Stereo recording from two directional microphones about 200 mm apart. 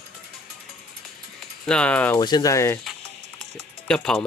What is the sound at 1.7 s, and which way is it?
Speech, 5° left (ahead or behind).